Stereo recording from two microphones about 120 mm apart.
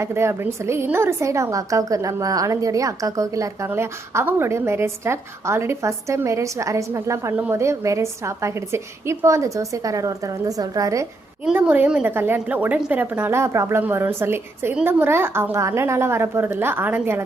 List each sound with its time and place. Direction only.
0.0 s a woman's voice: 20° right (ahead or behind)
11.6 s a woman's voice: 10° right (ahead or behind)